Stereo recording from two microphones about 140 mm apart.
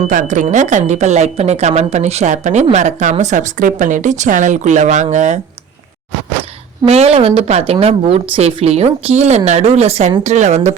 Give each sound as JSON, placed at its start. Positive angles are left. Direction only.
{"t": 0.1, "sound": "speech", "side_deg": -65}
{"t": 6.8, "sound": "speech", "side_deg": -50}